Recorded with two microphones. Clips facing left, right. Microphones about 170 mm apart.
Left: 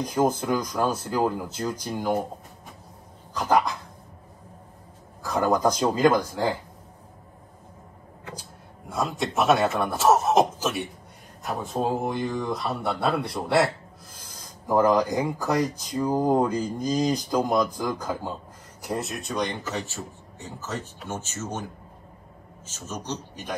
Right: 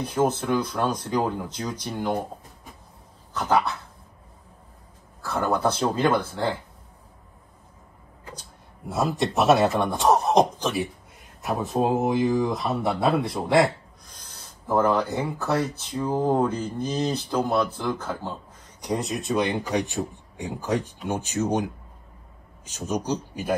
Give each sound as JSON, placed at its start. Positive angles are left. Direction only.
{"t": 0.1, "sound": "speech", "side_deg": 10}
{"t": 3.3, "sound": "speech", "side_deg": 10}
{"t": 5.2, "sound": "speech", "side_deg": 15}
{"t": 8.8, "sound": "speech", "side_deg": 0}
{"t": 19.7, "sound": "speech", "side_deg": -15}
{"t": 22.8, "sound": "speech", "side_deg": -10}